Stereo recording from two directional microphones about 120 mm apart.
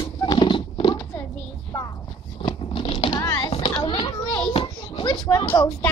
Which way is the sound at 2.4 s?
45° left (ahead or behind).